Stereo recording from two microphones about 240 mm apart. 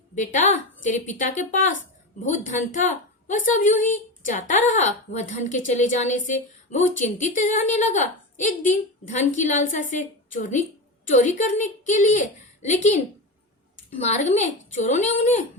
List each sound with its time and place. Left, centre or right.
0.2 s a woman's voice: left
14.1 s a woman's voice: left